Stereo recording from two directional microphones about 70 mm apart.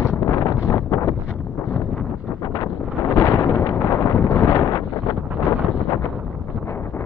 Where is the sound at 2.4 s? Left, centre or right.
Left.